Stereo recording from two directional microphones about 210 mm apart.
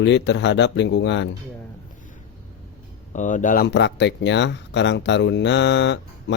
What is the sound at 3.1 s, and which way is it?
Speech, 35° left (ahead or behind).